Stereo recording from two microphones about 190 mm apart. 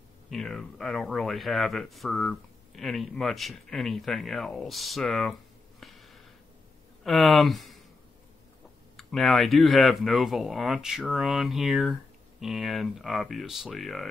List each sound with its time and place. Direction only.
0.3 s speech: centre (ahead or behind)
5.8 s a sound: centre (ahead or behind)
7.1 s speech: centre (ahead or behind)
8.9 s speech: centre (ahead or behind)